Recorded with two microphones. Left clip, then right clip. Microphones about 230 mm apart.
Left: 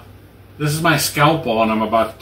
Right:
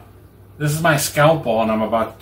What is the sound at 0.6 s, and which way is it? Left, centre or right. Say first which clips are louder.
Speech: left 1 dB; centre.